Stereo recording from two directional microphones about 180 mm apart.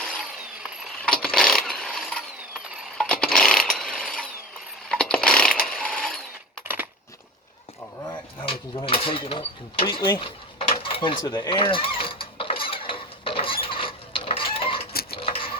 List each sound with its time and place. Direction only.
0.8 s mechanisms: 5° left (ahead or behind)
3.0 s a sound: 5° left (ahead or behind)
4.9 s mechanisms: 5° left (ahead or behind)
8.4 s mechanisms: 30° left (ahead or behind)
9.8 s cutlery: 25° left (ahead or behind)
15.1 s printer: 30° left (ahead or behind)